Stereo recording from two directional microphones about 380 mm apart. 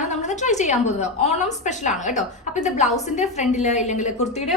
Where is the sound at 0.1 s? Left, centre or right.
Centre.